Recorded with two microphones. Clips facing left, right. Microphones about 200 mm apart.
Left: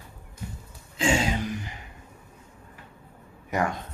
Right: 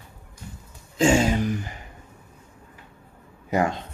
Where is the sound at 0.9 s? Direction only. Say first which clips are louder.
Right 6 dB; 45° right (ahead or behind).